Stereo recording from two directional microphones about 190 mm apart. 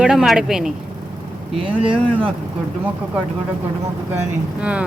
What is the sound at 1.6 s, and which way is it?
Speech, 30° right (ahead or behind).